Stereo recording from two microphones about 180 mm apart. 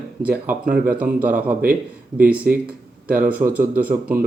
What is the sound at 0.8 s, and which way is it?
Speech, 10° right (ahead or behind).